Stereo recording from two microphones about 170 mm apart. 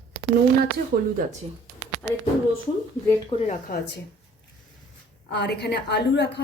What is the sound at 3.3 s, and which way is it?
Speech, 35° left (ahead or behind).